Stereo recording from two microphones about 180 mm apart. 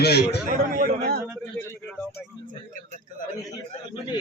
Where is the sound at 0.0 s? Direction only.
65° left (ahead or behind).